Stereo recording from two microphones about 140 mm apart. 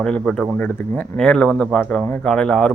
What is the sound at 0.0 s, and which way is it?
Speech, 5° left (ahead or behind).